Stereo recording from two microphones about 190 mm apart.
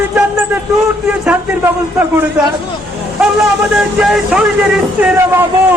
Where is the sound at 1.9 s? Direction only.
10° right (ahead or behind).